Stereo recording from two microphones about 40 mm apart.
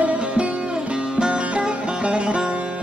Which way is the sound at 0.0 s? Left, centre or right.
Right.